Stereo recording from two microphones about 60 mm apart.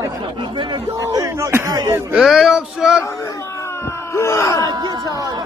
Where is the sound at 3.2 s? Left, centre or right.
Left.